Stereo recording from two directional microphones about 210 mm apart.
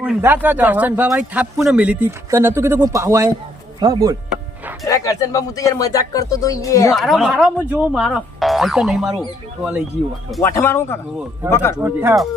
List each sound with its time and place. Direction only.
0.0 s a man's voice: 10° right (ahead or behind)
4.9 s speech: 15° left (ahead or behind)
6.9 s speech: centre (ahead or behind)
10.4 s speech: 15° left (ahead or behind)
11.8 s a man's voice: 10° right (ahead or behind)